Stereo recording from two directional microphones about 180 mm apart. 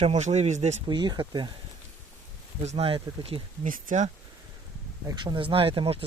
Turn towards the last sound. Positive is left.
turn(degrees=-30)  # may be behind; listen again after turning